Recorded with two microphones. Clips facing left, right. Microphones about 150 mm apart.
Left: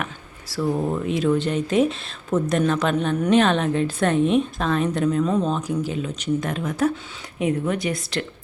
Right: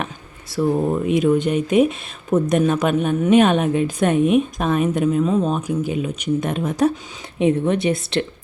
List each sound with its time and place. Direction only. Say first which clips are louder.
0.5 s speech: right 4 dB; 20° right (ahead or behind)